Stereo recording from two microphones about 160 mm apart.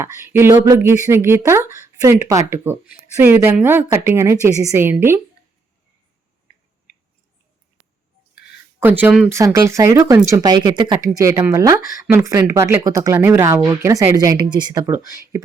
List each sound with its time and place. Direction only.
0.0 s speech: 15° right (ahead or behind)
8.8 s speech: 10° right (ahead or behind)